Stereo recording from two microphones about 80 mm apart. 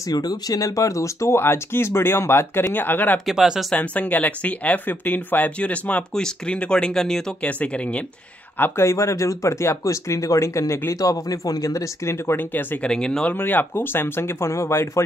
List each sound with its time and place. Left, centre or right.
0.0 s speech: left
3.3 s speech: centre
3.7 s speech: centre
7.4 s speech: centre
8.5 s speech: left
12.8 s speech: centre
13.3 s speech: left